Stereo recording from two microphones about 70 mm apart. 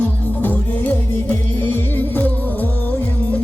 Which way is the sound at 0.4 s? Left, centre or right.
Left.